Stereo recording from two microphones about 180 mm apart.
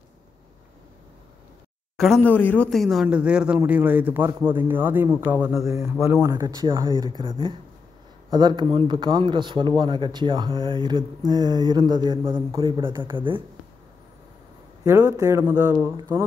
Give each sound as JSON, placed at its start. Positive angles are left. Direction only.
{"t": 2.2, "sound": "a man's voice", "side_deg": 10}
{"t": 5.7, "sound": "a man's voice", "side_deg": -15}
{"t": 14.9, "sound": "a man's voice", "side_deg": -15}